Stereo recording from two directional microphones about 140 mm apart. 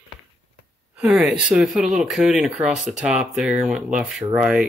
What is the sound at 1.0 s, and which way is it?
Speech, 5° right (ahead or behind).